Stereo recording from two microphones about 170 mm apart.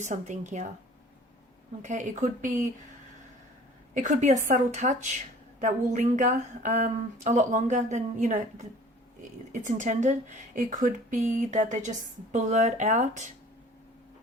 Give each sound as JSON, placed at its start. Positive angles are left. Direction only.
{"t": 0.0, "sound": "speech", "side_deg": -45}
{"t": 1.8, "sound": "speech", "side_deg": -45}
{"t": 3.9, "sound": "speech", "side_deg": -50}